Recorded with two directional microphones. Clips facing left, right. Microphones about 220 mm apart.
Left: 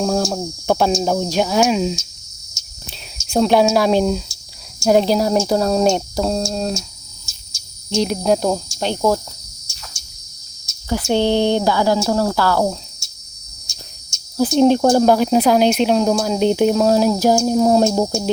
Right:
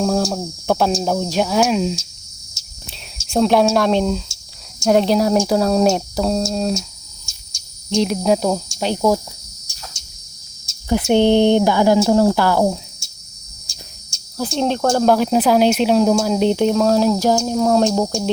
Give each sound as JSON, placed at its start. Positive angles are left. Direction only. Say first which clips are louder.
{"t": 0.0, "sound": "speech", "louder": "even", "side_deg": 0}
{"t": 2.6, "sound": "cricket", "louder": "even", "side_deg": -30}
{"t": 3.2, "sound": "speech", "louder": "even", "side_deg": 0}
{"t": 7.3, "sound": "cricket", "louder": "left 1 dB", "side_deg": 5}
{"t": 11.1, "sound": "speech", "louder": "right 3 dB", "side_deg": -15}
{"t": 14.3, "sound": "speech", "louder": "left 7 dB", "side_deg": 10}
{"t": 15.0, "sound": "speech", "louder": "left 1 dB", "side_deg": 0}